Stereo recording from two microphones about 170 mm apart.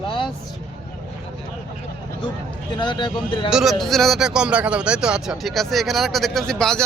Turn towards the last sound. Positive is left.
turn(degrees=5)  # may be behind; listen again after turning